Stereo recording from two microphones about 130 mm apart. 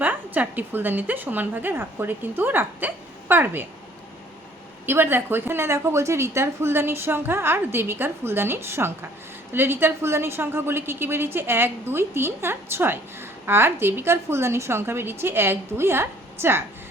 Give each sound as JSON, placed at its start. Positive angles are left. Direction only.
{"t": 0.0, "sound": "a woman's voice", "side_deg": -15}
{"t": 4.9, "sound": "a woman's voice", "side_deg": -15}